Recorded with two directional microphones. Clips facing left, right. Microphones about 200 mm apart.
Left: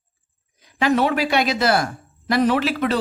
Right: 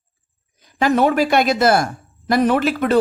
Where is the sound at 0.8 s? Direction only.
45° right (ahead or behind).